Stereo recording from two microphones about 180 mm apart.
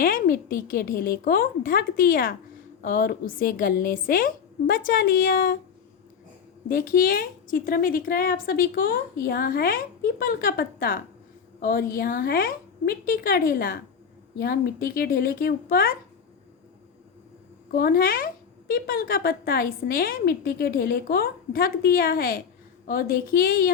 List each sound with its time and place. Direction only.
0.0 s a woman's voice: 50° left (ahead or behind)
6.7 s a woman's voice: 50° left (ahead or behind)
17.7 s a woman's voice: 55° left (ahead or behind)